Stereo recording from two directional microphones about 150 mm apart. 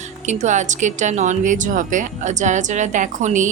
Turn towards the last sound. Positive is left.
turn(degrees=-55)  # may be behind; listen again after turning